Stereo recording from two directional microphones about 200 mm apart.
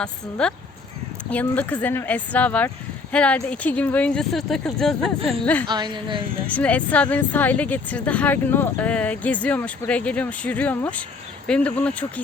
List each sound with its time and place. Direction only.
0.0 s speech: 5° left (ahead or behind)
5.6 s a woman's voice: 20° right (ahead or behind)
6.5 s speech: 5° left (ahead or behind)